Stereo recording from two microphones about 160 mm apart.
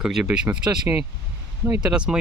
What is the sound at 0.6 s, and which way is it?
Speech, 25° right (ahead or behind).